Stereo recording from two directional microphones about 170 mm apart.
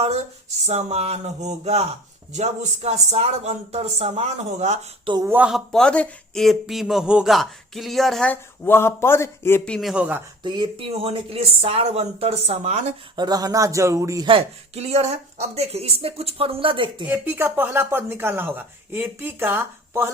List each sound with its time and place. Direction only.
0.6 s a woman's voice: 40° right (ahead or behind)
5.0 s speech: 25° right (ahead or behind)
5.3 s a man's voice: 5° right (ahead or behind)
9.9 s speech: 10° right (ahead or behind)
10.4 s a woman's voice: 25° right (ahead or behind)
13.1 s speech: 25° right (ahead or behind)
14.3 s a woman's voice: 35° right (ahead or behind)
17.1 s speech: 10° right (ahead or behind)